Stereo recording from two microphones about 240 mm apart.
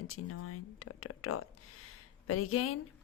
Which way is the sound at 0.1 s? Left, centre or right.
Left.